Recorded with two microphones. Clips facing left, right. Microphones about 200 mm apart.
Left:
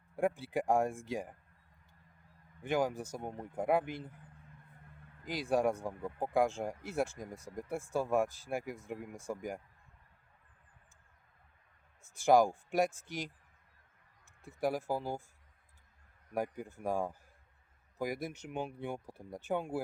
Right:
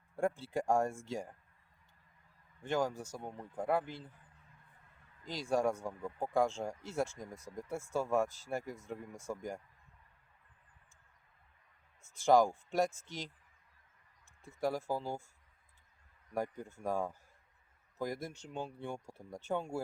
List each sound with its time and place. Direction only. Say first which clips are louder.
0.2 s speech: left 2 dB; 15° left (ahead or behind)
2.6 s speech: left 2 dB; 15° left (ahead or behind)
5.2 s speech: left 2 dB; 15° left (ahead or behind)
12.1 s speech: left 1 dB; 15° left (ahead or behind)
14.4 s speech: left 1 dB; 15° left (ahead or behind)
16.3 s speech: left 1 dB; 15° left (ahead or behind)